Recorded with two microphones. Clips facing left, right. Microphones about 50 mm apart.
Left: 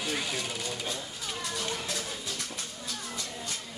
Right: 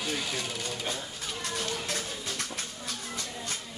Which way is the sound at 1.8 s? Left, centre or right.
Right.